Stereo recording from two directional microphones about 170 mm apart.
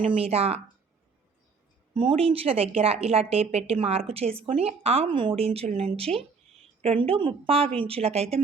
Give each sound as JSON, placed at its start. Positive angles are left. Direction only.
{"t": 0.2, "sound": "speech", "side_deg": -35}
{"t": 2.0, "sound": "speech", "side_deg": -30}